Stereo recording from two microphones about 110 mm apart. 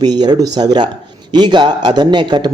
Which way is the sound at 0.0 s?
40° right (ahead or behind).